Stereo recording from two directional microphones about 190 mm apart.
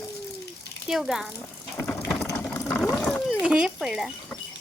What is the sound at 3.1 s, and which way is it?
Speech, 5° right (ahead or behind).